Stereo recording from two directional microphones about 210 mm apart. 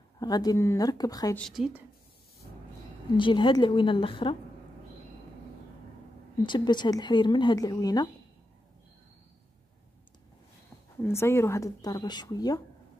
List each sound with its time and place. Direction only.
0.2 s speech: 20° left (ahead or behind)
1.4 s a woman's voice: centre (ahead or behind)
3.2 s speech: 25° left (ahead or behind)
6.4 s speech: 20° left (ahead or behind)
11.0 s speech: 10° left (ahead or behind)